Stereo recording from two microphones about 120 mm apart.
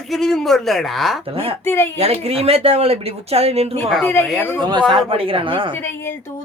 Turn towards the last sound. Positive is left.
turn(degrees=20)  # may be behind; listen again after turning